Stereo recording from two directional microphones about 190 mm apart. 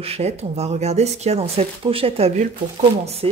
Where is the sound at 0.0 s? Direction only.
35° right (ahead or behind).